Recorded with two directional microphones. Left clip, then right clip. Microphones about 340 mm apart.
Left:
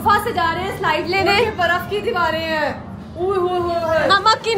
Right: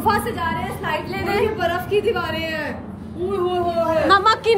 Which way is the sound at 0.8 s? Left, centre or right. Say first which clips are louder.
Left 9 dB; centre.